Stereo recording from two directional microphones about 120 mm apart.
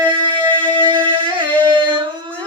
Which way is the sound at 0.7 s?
40° right (ahead or behind).